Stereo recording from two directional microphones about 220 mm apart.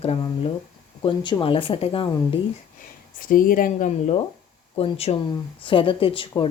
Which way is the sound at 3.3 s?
40° left (ahead or behind).